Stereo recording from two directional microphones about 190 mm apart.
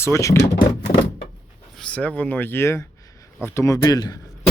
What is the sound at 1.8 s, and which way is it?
Speech, 5° left (ahead or behind).